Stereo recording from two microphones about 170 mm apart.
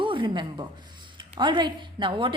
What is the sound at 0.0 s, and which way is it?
A woman's voice, 30° right (ahead or behind).